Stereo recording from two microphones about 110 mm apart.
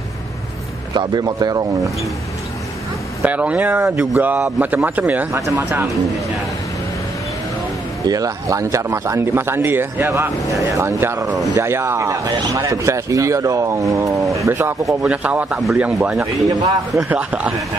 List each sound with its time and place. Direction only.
0.9 s a man's voice: 40° right (ahead or behind)
3.3 s speech: 15° right (ahead or behind)
5.4 s speech: 30° right (ahead or behind)
8.1 s speech: 30° right (ahead or behind)
15.0 s speech: 10° right (ahead or behind)
16.2 s a man's voice: 35° right (ahead or behind)
17.1 s speech: 15° right (ahead or behind)